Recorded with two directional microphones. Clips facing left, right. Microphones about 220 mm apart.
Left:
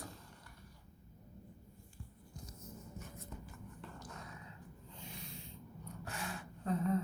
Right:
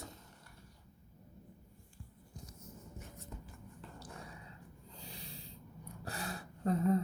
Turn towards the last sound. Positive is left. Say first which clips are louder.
# right 3 dB
turn(degrees=-40)  # may be behind; listen again after turning